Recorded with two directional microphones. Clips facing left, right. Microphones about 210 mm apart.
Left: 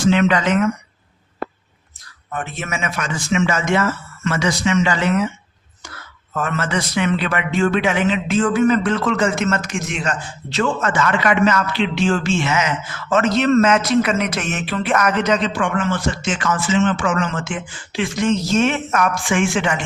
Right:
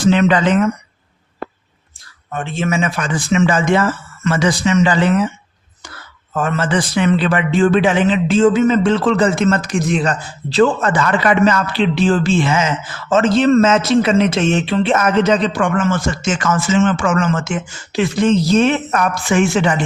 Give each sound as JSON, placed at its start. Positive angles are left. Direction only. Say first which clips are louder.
{"t": 0.1, "sound": "a man's voice", "louder": "right 3 dB", "side_deg": -35}
{"t": 2.3, "sound": "a man's voice", "louder": "right 7 dB", "side_deg": -25}
{"t": 6.3, "sound": "a man's voice", "louder": "right 4 dB", "side_deg": -30}